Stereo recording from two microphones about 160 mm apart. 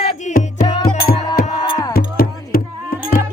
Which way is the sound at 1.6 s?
25° left (ahead or behind).